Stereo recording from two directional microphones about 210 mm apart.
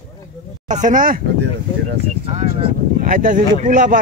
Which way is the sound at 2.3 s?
30° right (ahead or behind).